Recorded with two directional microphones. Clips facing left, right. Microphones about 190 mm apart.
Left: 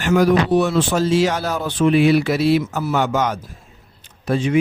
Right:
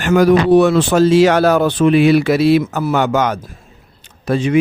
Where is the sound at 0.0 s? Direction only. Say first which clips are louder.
Right 4 dB; 60° right (ahead or behind).